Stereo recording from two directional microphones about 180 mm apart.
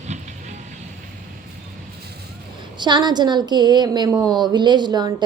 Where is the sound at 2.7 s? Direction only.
25° right (ahead or behind).